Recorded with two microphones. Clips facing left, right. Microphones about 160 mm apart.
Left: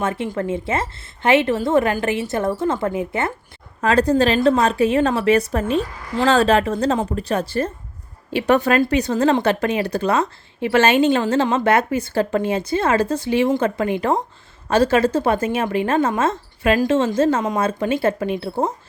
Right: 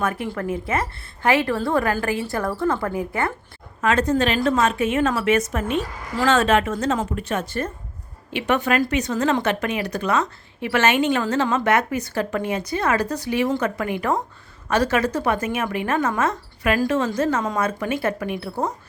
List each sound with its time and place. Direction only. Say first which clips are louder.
0.0 s speech: left 2 dB; 25° left (ahead or behind)
3.8 s a woman's voice: left 3 dB; 35° left (ahead or behind)